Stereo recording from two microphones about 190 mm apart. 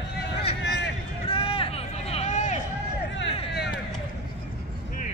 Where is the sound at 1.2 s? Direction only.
30° left (ahead or behind).